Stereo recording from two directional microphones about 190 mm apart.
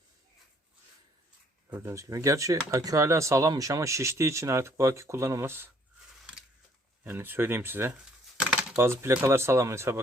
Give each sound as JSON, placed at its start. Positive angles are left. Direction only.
{"t": 1.7, "sound": "speech", "side_deg": -15}
{"t": 7.0, "sound": "speech", "side_deg": -10}